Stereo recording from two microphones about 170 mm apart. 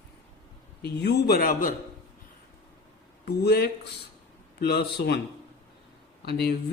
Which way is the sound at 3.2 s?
70° left (ahead or behind).